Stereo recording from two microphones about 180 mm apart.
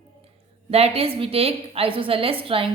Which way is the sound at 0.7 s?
35° right (ahead or behind).